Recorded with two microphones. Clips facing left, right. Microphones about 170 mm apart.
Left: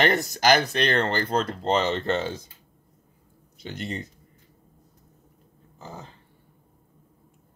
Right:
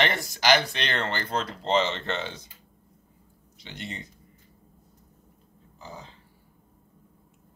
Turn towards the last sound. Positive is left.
turn(degrees=45)  # may be behind; listen again after turning